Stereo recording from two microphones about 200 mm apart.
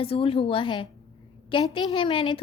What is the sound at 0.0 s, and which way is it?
A woman's voice, 25° left (ahead or behind).